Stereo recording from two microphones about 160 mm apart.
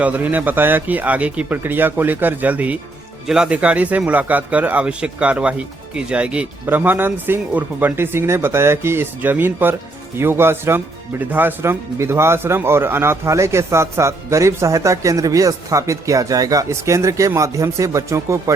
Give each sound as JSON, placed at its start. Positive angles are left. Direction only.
{"t": 0.0, "sound": "a man's voice", "side_deg": -10}